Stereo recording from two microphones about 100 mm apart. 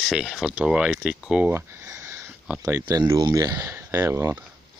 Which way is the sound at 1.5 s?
30° right (ahead or behind).